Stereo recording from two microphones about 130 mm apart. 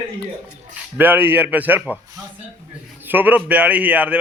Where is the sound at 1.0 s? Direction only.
15° right (ahead or behind).